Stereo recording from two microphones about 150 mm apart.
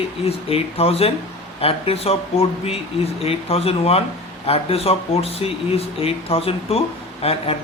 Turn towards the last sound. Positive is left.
turn(degrees=40)  # may be behind; listen again after turning